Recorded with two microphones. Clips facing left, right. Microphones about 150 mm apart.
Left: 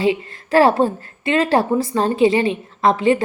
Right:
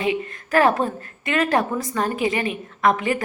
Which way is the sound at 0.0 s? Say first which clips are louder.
Left 4 dB; 30° left (ahead or behind).